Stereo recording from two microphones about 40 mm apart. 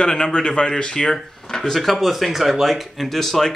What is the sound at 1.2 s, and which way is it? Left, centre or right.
Speech, centre.